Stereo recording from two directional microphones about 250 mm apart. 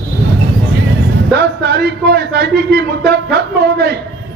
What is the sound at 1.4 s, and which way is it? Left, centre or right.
A man's voice, right.